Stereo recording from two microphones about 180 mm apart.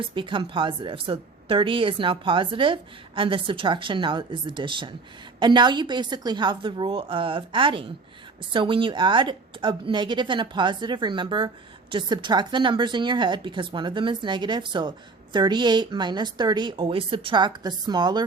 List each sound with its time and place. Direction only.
0.0 s a woman's voice: 25° right (ahead or behind)